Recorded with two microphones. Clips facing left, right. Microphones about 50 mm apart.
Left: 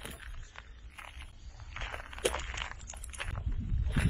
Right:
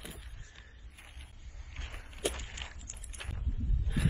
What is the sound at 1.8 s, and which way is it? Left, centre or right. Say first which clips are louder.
Walk: left 5 dB; left.